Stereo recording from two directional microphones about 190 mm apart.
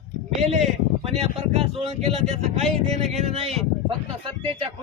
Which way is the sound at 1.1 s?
30° right (ahead or behind).